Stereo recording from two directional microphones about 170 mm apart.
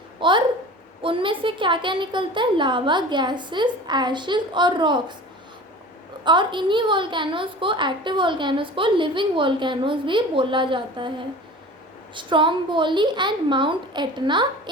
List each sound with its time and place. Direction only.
0.2 s a woman's voice: 30° right (ahead or behind)
6.2 s a woman's voice: 25° right (ahead or behind)
12.1 s a woman's voice: 30° right (ahead or behind)